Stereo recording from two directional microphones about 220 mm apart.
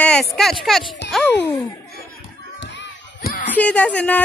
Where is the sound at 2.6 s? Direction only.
55° left (ahead or behind).